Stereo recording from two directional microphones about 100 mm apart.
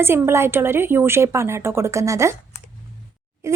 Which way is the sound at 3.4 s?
30° right (ahead or behind).